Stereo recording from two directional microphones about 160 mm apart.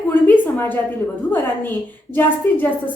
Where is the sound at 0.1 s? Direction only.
10° left (ahead or behind).